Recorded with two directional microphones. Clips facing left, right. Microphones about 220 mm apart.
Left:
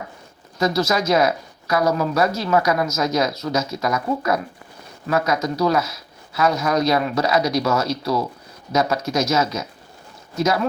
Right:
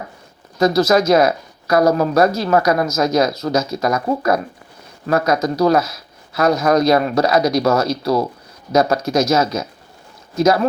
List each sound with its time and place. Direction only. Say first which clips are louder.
0.6 s speech: right 6 dB; 40° right (ahead or behind)